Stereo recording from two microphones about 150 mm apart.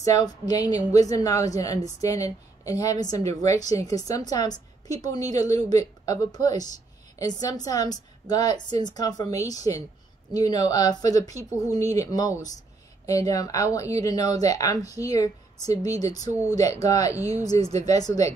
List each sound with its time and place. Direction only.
0.0 s a woman's voice: 25° left (ahead or behind)
17.6 s speech: 45° right (ahead or behind)
17.8 s a woman's voice: 25° left (ahead or behind)